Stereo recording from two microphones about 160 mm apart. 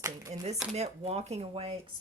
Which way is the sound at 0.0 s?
20° right (ahead or behind).